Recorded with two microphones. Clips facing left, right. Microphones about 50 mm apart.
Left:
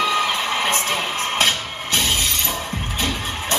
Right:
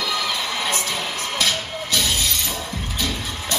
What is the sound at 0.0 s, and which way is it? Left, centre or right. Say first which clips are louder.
Music: left 4 dB; left.